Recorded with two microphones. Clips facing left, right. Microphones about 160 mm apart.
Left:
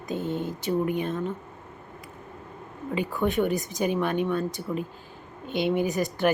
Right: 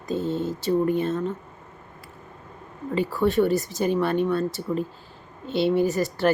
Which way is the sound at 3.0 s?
15° left (ahead or behind).